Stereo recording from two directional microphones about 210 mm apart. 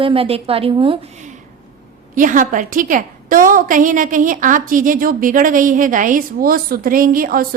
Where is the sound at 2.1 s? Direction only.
40° right (ahead or behind).